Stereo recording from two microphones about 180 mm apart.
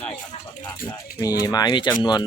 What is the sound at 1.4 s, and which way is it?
Speech, 20° left (ahead or behind).